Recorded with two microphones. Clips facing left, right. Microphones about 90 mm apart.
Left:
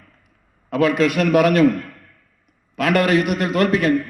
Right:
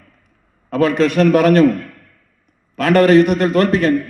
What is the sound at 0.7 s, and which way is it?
Speech, 35° right (ahead or behind).